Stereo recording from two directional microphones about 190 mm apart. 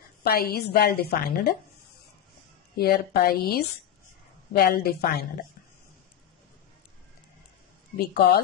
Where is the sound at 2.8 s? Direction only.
55° left (ahead or behind).